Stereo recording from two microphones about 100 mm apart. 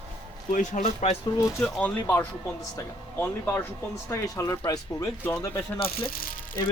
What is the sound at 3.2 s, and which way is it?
Speech, 20° left (ahead or behind).